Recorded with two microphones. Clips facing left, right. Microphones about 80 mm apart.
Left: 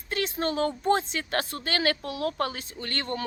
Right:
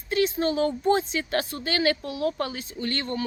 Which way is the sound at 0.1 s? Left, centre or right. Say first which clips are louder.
Right 5 dB; left.